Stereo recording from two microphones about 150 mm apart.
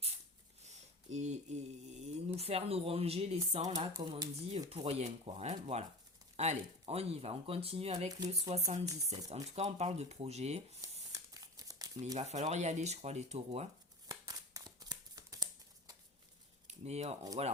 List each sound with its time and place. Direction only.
0.6 s mantra: 50° right (ahead or behind)
3.8 s speech: 30° right (ahead or behind)
4.7 s speech: 40° right (ahead or behind)
11.1 s crumpling: 20° right (ahead or behind)
12.1 s speech: 50° right (ahead or behind)
14.1 s shuffling cards: 25° right (ahead or behind)
16.6 s speech: 45° right (ahead or behind)